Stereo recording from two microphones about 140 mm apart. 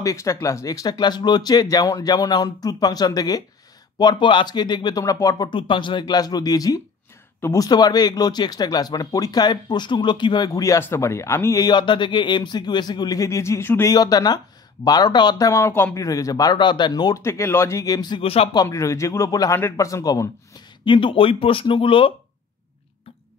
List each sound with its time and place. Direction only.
0.0 s speech: 20° left (ahead or behind)
13.9 s speech: 25° left (ahead or behind)
18.2 s speech: 45° left (ahead or behind)
18.5 s speech: 25° left (ahead or behind)
20.8 s speech: 35° left (ahead or behind)